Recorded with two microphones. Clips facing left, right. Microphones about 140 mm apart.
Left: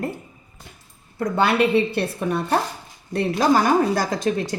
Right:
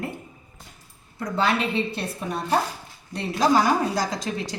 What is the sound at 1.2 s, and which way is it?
A woman's voice, 65° left (ahead or behind).